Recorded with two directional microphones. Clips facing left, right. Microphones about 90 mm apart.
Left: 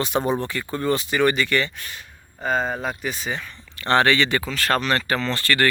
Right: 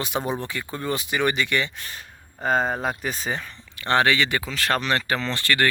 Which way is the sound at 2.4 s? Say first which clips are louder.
Right 1 dB; 35° right (ahead or behind).